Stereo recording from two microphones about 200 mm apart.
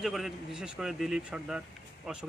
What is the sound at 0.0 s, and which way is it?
A man's voice, centre (ahead or behind).